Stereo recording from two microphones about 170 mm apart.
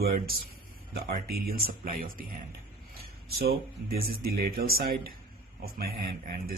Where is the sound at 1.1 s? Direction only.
60° right (ahead or behind).